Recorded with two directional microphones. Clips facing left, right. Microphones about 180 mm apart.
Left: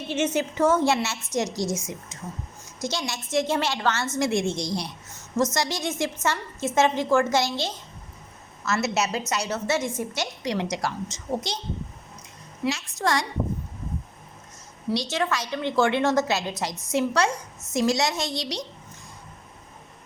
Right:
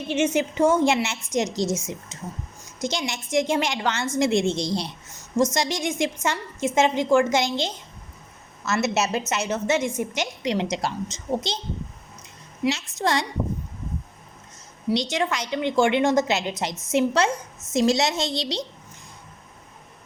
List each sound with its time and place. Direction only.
0.1 s a woman's voice: 15° right (ahead or behind)
12.6 s a woman's voice: 15° right (ahead or behind)
15.1 s a woman's voice: 20° right (ahead or behind)